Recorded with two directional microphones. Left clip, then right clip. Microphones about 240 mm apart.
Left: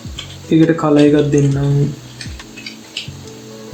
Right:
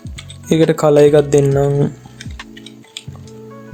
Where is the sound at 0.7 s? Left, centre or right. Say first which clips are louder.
Right 5 dB; right.